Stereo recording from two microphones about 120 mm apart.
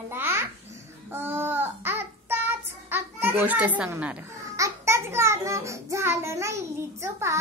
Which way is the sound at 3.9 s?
10° right (ahead or behind).